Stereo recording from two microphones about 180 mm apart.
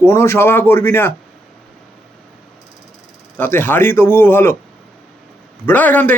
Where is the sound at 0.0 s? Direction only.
15° left (ahead or behind).